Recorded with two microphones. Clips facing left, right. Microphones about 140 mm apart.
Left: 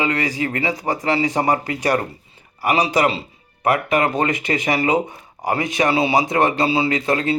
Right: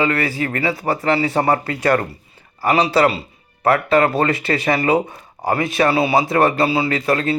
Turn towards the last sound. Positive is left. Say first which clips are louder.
# right 1 dB
turn(degrees=20)  # may be behind; listen again after turning